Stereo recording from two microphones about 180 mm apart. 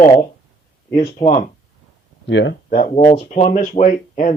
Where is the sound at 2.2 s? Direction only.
80° left.